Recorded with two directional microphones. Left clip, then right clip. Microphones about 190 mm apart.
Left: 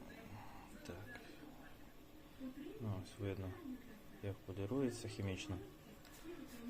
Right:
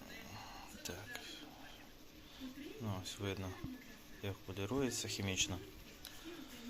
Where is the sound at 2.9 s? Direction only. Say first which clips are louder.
Right 5 dB; 5° right (ahead or behind).